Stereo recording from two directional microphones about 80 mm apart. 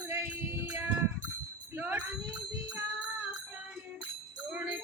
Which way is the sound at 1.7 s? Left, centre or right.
Right.